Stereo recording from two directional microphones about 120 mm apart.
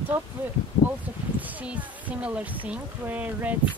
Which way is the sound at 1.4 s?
15° right (ahead or behind).